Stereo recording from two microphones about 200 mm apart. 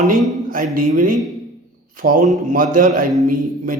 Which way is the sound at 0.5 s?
45° right (ahead or behind).